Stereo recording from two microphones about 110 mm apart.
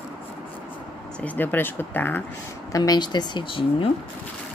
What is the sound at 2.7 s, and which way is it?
Speech, 35° left (ahead or behind).